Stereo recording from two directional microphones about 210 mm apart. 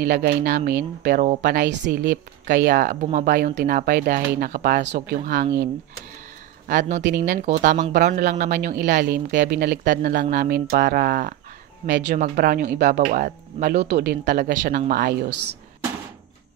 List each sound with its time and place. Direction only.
0.0 s speech: 45° right (ahead or behind)
1.4 s speech: 50° right (ahead or behind)
6.7 s speech: 35° right (ahead or behind)
8.8 s speech: 55° right (ahead or behind)